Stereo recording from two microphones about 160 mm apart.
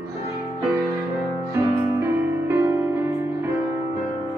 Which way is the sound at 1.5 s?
15° right (ahead or behind).